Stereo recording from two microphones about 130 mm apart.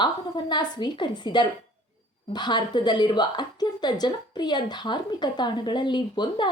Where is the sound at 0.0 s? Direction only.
35° left (ahead or behind).